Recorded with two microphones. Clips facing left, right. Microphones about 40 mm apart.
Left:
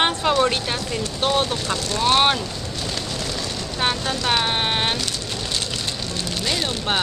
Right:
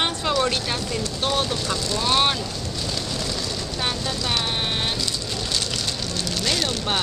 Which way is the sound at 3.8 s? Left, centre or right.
Left.